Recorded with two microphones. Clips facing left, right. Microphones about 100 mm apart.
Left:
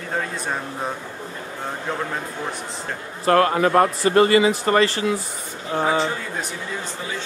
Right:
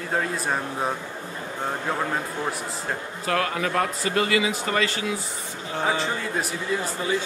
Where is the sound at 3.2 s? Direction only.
40° left (ahead or behind).